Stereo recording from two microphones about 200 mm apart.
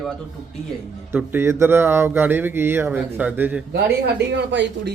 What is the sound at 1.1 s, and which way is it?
Speech, 10° right (ahead or behind).